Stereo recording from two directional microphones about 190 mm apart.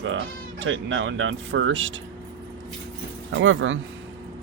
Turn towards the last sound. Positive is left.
turn(degrees=-90)